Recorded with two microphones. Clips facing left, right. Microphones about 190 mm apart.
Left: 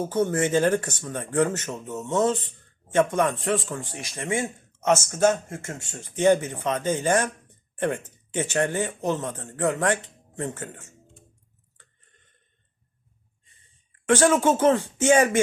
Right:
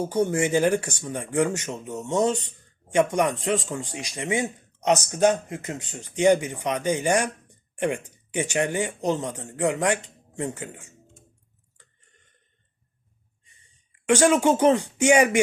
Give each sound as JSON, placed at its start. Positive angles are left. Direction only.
{"t": 0.0, "sound": "speech", "side_deg": -15}
{"t": 13.4, "sound": "speech", "side_deg": -15}